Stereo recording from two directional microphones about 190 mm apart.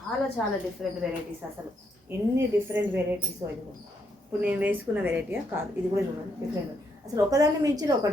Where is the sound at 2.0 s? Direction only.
15° right (ahead or behind).